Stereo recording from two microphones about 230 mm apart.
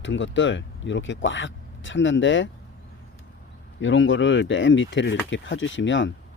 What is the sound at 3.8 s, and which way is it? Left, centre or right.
Speech, left.